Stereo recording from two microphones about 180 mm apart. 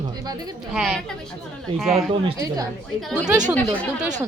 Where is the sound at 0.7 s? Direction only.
Centre (ahead or behind).